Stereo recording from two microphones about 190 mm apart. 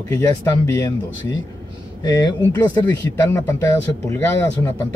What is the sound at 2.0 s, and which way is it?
Speech, 20° left (ahead or behind).